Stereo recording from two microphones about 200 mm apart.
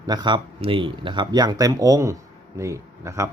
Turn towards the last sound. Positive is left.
turn(degrees=-15)  # may be behind; listen again after turning